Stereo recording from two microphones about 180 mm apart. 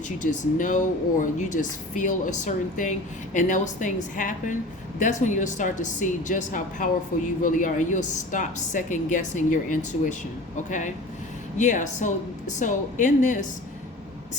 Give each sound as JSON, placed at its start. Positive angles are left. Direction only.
{"t": 0.2, "sound": "speech", "side_deg": 45}